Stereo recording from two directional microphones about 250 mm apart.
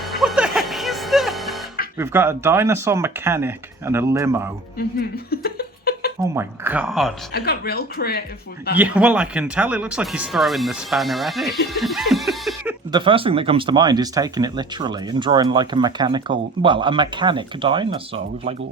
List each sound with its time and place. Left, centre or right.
0.2 s music: centre
2.0 s speech: centre
5.3 s a sound: left
6.3 s speech: centre
7.3 s speech: left
8.7 s speech: centre
11.8 s snicker: centre
12.9 s speech: centre